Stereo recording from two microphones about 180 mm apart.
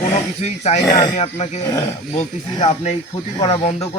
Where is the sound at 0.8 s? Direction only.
20° left (ahead or behind).